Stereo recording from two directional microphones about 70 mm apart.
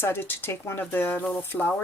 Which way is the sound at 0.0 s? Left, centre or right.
Left.